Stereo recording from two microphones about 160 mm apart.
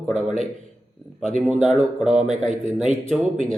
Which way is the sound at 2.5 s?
50° right (ahead or behind).